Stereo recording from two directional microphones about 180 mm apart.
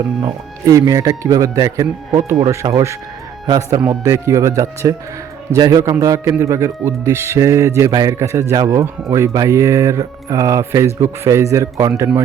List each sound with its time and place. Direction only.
0.2 s speech: 20° right (ahead or behind)